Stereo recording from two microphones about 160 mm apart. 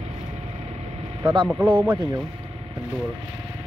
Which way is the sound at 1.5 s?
10° right (ahead or behind).